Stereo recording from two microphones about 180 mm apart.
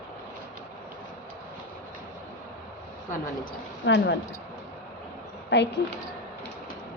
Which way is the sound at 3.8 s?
90° left.